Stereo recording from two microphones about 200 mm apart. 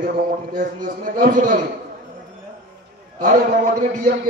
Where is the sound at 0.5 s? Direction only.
45° right (ahead or behind).